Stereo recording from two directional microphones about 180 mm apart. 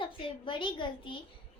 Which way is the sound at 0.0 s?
25° left (ahead or behind).